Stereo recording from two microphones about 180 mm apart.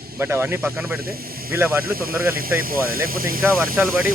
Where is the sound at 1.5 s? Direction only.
15° right (ahead or behind).